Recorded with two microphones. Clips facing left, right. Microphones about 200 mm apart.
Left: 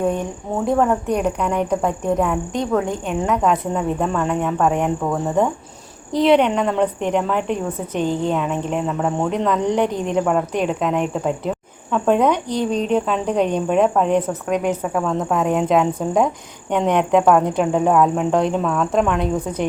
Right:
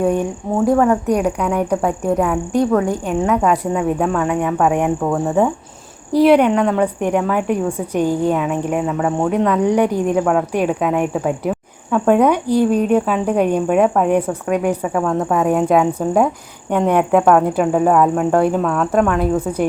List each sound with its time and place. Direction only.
0.0 s speech: 10° right (ahead or behind)